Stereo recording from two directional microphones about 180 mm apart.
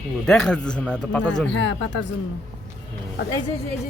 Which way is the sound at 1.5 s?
85° left.